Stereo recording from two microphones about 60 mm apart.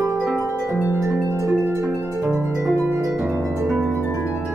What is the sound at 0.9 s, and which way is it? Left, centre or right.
Harp, right.